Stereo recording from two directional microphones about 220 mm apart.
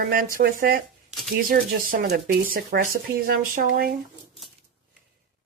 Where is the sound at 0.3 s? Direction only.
45° right (ahead or behind).